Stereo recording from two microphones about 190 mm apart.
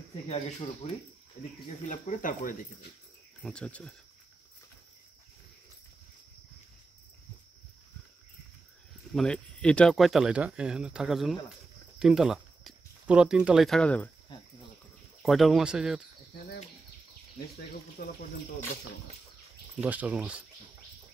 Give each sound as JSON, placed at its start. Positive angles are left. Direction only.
{"t": 0.8, "sound": "speech", "side_deg": 35}
{"t": 3.4, "sound": "speech", "side_deg": 5}
{"t": 9.1, "sound": "speech", "side_deg": 5}
{"t": 15.2, "sound": "speech", "side_deg": 0}
{"t": 18.0, "sound": "speech", "side_deg": 45}
{"t": 19.8, "sound": "speech", "side_deg": -10}